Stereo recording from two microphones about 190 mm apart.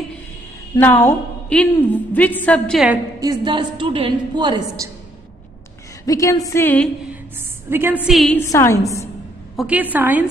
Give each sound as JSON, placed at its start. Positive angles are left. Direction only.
{"t": 0.7, "sound": "a woman's voice", "side_deg": 10}
{"t": 3.2, "sound": "a woman's voice", "side_deg": -20}
{"t": 6.0, "sound": "a woman's voice", "side_deg": 15}
{"t": 7.3, "sound": "a woman's voice", "side_deg": -10}
{"t": 8.1, "sound": "a woman's voice", "side_deg": 0}
{"t": 8.4, "sound": "a woman's voice", "side_deg": 15}
{"t": 9.6, "sound": "a woman's voice", "side_deg": -10}